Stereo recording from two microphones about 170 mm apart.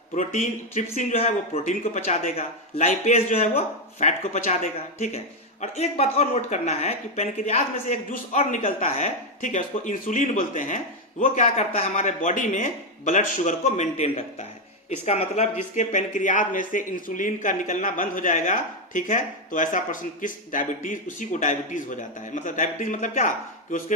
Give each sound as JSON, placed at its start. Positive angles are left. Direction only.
{"t": 0.2, "sound": "speech", "side_deg": 45}